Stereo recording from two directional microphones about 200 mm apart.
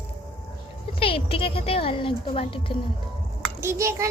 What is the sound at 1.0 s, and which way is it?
Speech, 25° left (ahead or behind).